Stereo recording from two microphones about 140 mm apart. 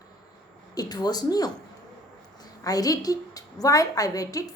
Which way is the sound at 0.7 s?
30° left (ahead or behind).